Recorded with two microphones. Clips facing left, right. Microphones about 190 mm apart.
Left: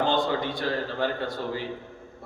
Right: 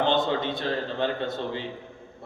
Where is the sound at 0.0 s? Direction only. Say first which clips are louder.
Right 1 dB; 25° right (ahead or behind).